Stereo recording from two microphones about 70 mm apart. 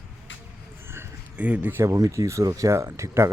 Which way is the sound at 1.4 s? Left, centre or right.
Right.